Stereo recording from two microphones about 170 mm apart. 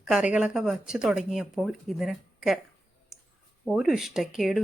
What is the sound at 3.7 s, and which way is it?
Speech, 5° right (ahead or behind).